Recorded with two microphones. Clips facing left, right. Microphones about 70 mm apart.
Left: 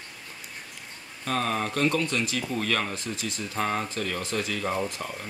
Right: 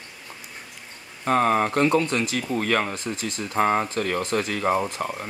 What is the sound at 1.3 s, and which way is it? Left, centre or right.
Speech, right.